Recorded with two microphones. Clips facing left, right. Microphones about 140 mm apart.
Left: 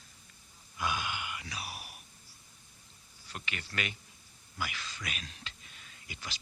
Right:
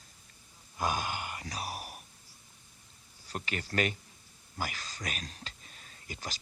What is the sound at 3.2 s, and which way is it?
A man's voice, 40° right (ahead or behind).